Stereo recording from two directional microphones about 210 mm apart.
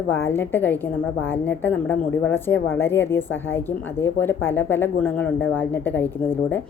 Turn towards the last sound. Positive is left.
turn(degrees=10)  # may be behind; listen again after turning